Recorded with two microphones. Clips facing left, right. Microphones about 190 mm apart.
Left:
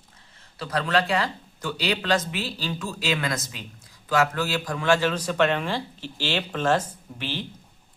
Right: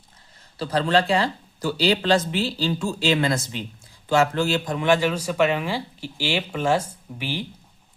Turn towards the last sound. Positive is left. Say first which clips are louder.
# right 2 dB
turn(degrees=-10)  # may be behind; listen again after turning